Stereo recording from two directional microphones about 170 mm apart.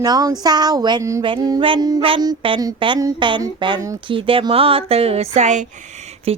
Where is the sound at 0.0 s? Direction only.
20° right (ahead or behind).